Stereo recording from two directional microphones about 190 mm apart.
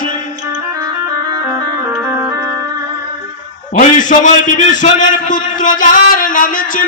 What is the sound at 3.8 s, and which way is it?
A man's voice, 40° left (ahead or behind).